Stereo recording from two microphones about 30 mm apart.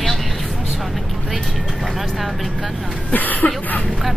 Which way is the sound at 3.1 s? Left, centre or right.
Left.